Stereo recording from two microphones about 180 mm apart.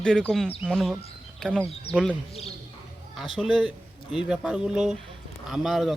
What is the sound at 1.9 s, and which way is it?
Speech, 30° left (ahead or behind).